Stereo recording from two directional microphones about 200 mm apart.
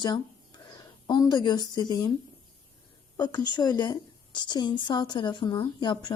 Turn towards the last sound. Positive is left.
turn(degrees=20)  # may be behind; listen again after turning